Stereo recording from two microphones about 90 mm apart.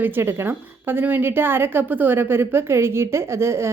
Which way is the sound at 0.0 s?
25° right (ahead or behind).